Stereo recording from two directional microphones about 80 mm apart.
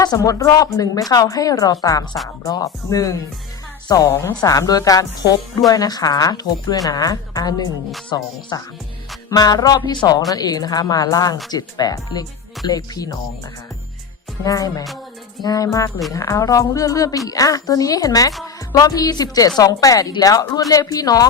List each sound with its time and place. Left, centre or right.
0.0 s a woman's voice: left
4.1 s a woman's voice: left
4.4 s a woman's voice: left
14.4 s a woman's voice: left